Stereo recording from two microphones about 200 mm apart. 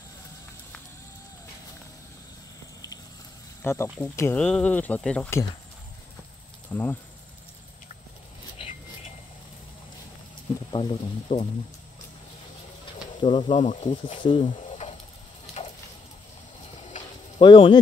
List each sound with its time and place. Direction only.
3.6 s speech: 15° left (ahead or behind)
6.7 s speech: 10° left (ahead or behind)
10.7 s speech: 25° left (ahead or behind)
13.2 s speech: 25° left (ahead or behind)
15.6 s a sound: 30° left (ahead or behind)
17.4 s speech: 25° left (ahead or behind)